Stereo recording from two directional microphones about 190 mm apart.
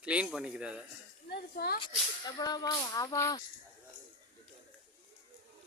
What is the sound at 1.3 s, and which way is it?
Speech, 60° left (ahead or behind).